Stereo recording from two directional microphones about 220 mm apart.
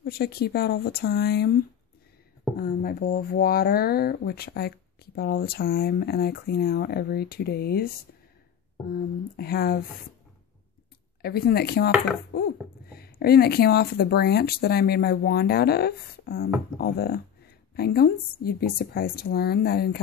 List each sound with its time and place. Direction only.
0.0 s speech: 45° left (ahead or behind)
2.5 s speech: 40° left (ahead or behind)
9.4 s speech: 45° left (ahead or behind)
11.2 s speech: 45° left (ahead or behind)